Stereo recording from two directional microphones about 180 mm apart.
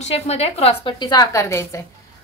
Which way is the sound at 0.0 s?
35° left (ahead or behind).